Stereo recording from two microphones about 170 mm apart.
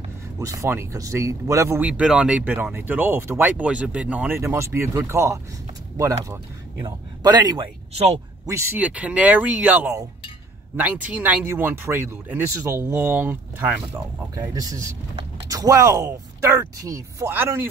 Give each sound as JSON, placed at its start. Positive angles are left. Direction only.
{"t": 0.4, "sound": "speech", "side_deg": -20}
{"t": 8.5, "sound": "speech", "side_deg": -15}
{"t": 11.1, "sound": "speech", "side_deg": -5}